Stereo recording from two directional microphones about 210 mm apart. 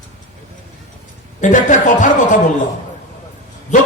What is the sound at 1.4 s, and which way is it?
A man's voice, 35° left (ahead or behind).